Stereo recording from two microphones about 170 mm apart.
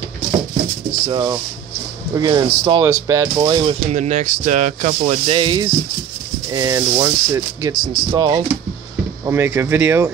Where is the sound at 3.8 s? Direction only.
45° right (ahead or behind); by 8.4 s 25° right (ahead or behind).